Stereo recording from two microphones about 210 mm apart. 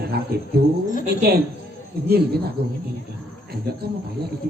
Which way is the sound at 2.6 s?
50° right (ahead or behind).